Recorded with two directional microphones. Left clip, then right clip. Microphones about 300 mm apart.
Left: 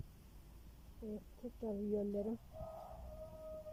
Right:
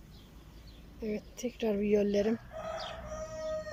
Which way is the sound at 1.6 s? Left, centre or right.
Right.